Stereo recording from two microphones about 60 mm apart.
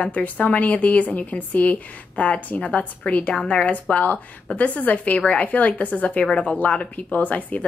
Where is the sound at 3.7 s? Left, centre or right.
Left.